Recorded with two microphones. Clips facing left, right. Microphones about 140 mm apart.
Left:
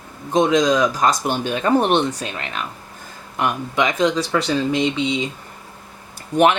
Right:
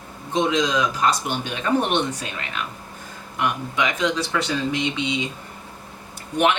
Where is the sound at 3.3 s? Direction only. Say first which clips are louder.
Left 3 dB; 35° left (ahead or behind).